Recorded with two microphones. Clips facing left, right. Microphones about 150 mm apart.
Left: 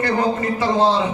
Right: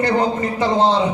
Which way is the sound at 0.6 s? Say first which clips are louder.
Right 1 dB; 20° right (ahead or behind).